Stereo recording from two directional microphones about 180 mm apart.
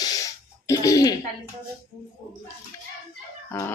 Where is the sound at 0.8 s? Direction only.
20° left (ahead or behind).